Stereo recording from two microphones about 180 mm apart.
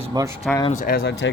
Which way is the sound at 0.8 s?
55° left (ahead or behind).